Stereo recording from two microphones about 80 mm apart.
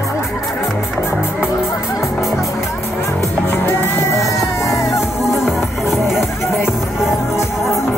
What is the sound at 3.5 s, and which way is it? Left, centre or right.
Music, left.